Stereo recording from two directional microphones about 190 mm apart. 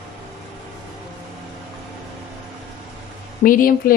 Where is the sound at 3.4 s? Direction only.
45° left (ahead or behind).